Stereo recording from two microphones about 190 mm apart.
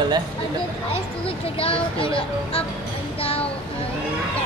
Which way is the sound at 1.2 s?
30° left (ahead or behind).